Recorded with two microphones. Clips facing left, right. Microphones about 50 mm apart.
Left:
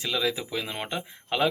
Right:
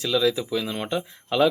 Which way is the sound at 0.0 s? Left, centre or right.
Left.